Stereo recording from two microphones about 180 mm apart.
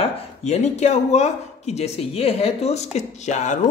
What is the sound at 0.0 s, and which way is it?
Speech, 40° left (ahead or behind).